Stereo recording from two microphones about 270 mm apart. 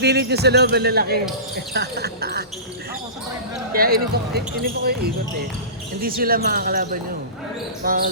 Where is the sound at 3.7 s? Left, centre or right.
Right.